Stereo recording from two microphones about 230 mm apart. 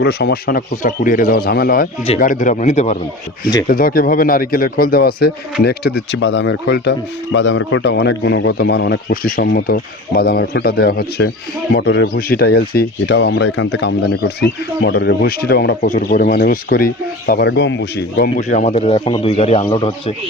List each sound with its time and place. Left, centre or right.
0.0 s speech: left
18.3 s a man's voice: left